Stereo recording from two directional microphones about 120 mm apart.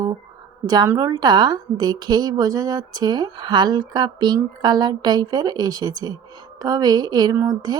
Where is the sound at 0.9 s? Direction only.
30° right (ahead or behind).